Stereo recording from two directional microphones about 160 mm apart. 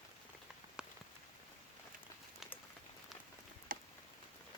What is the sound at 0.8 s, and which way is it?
Rain on surface, 5° right (ahead or behind).